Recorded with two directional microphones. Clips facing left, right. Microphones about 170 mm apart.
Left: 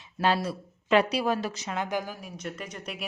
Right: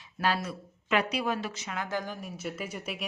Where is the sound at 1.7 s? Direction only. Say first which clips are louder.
Left 4 dB; 25° left (ahead or behind).